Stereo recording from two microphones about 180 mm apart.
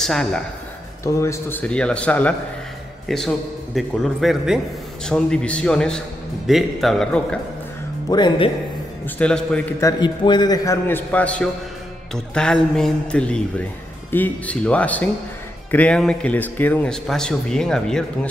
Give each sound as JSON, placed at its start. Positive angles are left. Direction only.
{"t": 0.0, "sound": "speech", "side_deg": 0}
{"t": 1.0, "sound": "a man's voice", "side_deg": 15}
{"t": 8.1, "sound": "speech", "side_deg": 25}
{"t": 9.0, "sound": "speech", "side_deg": 5}
{"t": 9.8, "sound": "a man's voice", "side_deg": 20}